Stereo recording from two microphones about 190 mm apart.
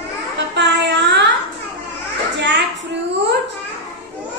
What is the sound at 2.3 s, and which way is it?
Child singing, 65° right (ahead or behind).